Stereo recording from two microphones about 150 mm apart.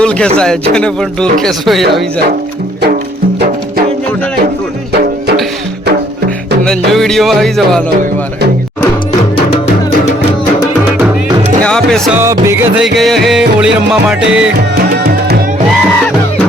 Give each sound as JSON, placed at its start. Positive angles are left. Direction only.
{"t": 0.0, "sound": "speech", "side_deg": 5}
{"t": 6.7, "sound": "speech", "side_deg": 5}
{"t": 11.6, "sound": "music", "side_deg": 5}
{"t": 12.1, "sound": "music", "side_deg": -20}
{"t": 12.8, "sound": "speech", "side_deg": 0}
{"t": 14.8, "sound": "music", "side_deg": -90}